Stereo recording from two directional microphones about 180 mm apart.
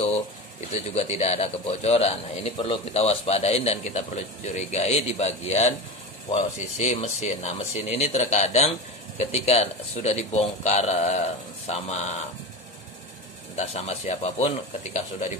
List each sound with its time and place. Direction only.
0.9 s a man's voice: 35° left (ahead or behind)
13.6 s a man's voice: 40° left (ahead or behind)